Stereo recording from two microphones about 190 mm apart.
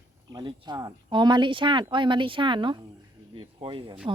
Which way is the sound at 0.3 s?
20° right (ahead or behind).